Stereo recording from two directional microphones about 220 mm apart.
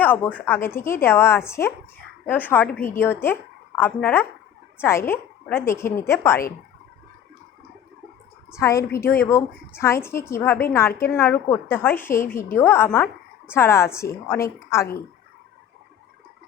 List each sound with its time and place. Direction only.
0.0 s a woman's voice: 10° left (ahead or behind)
8.5 s a woman's voice: 15° left (ahead or behind)